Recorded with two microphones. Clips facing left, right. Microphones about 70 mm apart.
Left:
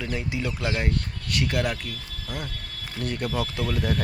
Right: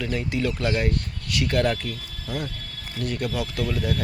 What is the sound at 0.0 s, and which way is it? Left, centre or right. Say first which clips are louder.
Speech: right 4 dB; centre.